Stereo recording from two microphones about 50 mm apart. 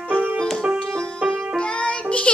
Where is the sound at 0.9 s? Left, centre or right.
Centre.